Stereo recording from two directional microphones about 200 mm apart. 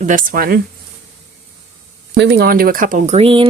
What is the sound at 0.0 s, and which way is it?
Speech, 40° right (ahead or behind).